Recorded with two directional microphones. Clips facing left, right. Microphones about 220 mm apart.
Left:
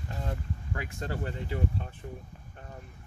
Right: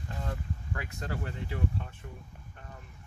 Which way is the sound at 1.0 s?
30° left (ahead or behind).